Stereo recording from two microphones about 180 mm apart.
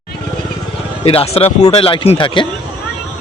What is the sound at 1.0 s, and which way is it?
Speech, 35° left (ahead or behind).